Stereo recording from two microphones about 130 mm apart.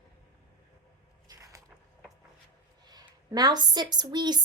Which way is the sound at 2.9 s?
30° right (ahead or behind).